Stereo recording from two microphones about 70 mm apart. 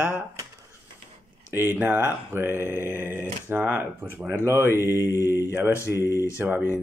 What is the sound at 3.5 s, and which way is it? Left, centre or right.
Mantra, right.